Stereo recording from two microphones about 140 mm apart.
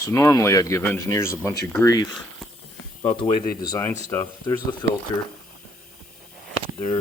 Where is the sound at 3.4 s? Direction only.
25° left (ahead or behind).